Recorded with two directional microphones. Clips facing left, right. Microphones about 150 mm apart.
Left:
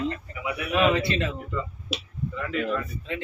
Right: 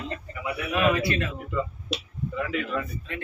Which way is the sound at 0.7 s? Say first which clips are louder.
Left 1 dB; 25° left (ahead or behind).